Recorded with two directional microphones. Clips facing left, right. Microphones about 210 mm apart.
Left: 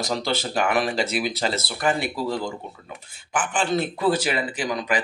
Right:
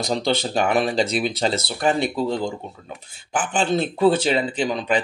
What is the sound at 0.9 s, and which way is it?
Speech, 5° left (ahead or behind).